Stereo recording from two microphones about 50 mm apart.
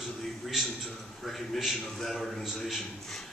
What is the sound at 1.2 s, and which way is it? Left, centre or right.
A man's voice, centre.